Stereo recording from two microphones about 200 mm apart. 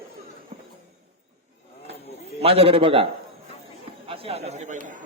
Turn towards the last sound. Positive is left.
turn(degrees=-40)  # may be behind; listen again after turning